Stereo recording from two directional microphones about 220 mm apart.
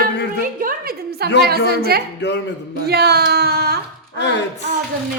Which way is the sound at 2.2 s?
50° left (ahead or behind).